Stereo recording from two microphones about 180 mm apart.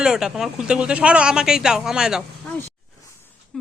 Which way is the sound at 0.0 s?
5° right (ahead or behind).